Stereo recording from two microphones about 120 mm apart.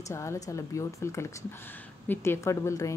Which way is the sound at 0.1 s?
25° left (ahead or behind).